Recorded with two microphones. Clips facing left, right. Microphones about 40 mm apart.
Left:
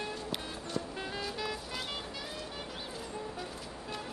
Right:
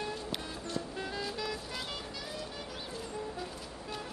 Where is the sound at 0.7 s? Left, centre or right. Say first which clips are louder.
Even; left.